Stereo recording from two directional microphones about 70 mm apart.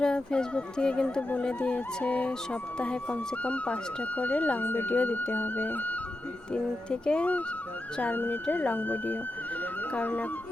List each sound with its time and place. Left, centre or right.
0.0 s speech: centre
6.5 s speech: centre